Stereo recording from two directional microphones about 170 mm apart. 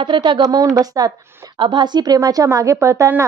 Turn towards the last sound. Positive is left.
turn(degrees=-15)  # may be behind; listen again after turning